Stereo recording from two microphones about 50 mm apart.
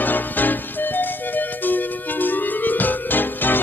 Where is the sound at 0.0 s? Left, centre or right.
Left.